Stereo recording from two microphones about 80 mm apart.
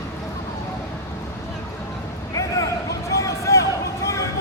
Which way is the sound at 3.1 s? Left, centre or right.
Left.